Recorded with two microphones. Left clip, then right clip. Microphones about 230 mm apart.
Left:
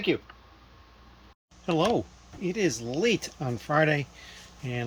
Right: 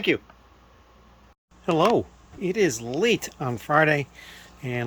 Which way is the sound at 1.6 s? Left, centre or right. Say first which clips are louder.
Right 5 dB; centre.